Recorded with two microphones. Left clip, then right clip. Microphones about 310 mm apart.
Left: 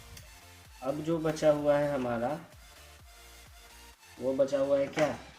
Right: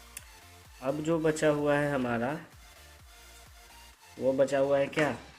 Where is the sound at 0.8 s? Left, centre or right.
Centre.